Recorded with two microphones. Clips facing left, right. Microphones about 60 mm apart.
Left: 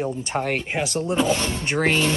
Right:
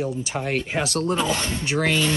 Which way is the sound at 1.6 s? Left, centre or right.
Left.